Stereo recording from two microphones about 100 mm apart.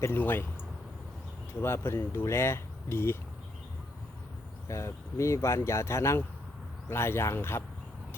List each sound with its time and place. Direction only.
0.0 s speech: 20° left (ahead or behind)
1.6 s speech: 25° left (ahead or behind)
4.7 s speech: 30° left (ahead or behind)